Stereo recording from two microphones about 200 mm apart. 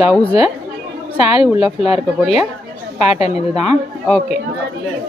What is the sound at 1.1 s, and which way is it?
Speech, 30° left (ahead or behind).